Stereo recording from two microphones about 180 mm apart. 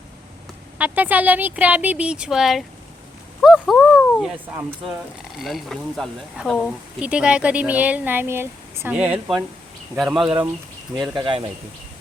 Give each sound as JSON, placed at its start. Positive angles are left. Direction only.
{"t": 0.8, "sound": "speech", "side_deg": -10}
{"t": 5.4, "sound": "speech", "side_deg": 0}
{"t": 11.1, "sound": "speech", "side_deg": -25}